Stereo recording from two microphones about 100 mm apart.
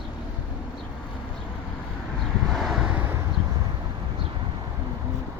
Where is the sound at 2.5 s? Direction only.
Centre (ahead or behind).